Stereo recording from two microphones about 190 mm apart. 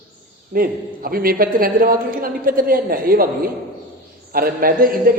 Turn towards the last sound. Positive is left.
turn(degrees=-50)  # may be behind; listen again after turning